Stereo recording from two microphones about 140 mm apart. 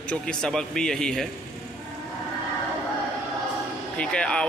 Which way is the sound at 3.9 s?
5° left (ahead or behind).